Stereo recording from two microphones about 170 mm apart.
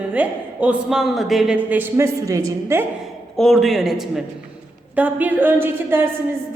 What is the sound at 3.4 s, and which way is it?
A man's voice, centre (ahead or behind).